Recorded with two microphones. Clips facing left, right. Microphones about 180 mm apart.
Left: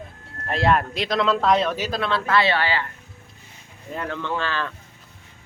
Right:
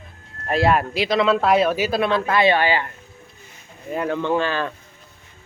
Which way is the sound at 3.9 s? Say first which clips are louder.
Right 7 dB; 15° right (ahead or behind).